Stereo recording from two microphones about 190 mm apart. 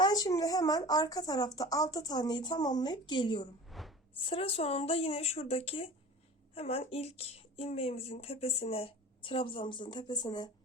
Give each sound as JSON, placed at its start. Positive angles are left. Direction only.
{"t": 0.0, "sound": "speech", "side_deg": 20}
{"t": 3.7, "sound": "a sound", "side_deg": 0}
{"t": 4.3, "sound": "speech", "side_deg": 30}